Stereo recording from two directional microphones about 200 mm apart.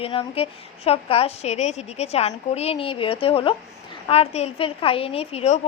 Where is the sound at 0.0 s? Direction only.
30° left (ahead or behind).